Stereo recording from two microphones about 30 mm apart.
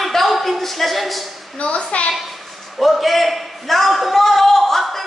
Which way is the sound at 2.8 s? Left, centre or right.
Centre.